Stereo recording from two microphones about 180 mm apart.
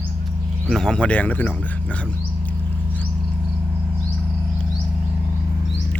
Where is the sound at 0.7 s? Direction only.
5° left (ahead or behind).